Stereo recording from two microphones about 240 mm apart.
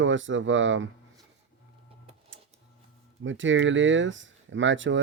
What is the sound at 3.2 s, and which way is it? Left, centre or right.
Speech, right.